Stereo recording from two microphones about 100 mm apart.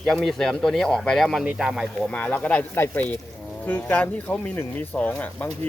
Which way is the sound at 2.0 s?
15° left (ahead or behind).